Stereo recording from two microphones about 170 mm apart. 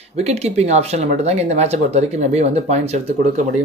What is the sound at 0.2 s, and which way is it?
Speech, 40° right (ahead or behind).